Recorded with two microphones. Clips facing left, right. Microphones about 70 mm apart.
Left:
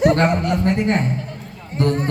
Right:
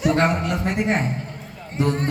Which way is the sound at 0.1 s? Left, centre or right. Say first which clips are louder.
Left 3 dB; centre.